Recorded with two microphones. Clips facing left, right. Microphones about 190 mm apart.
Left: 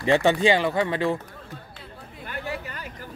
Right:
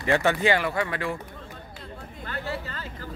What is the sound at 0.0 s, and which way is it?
Speech, 20° left (ahead or behind).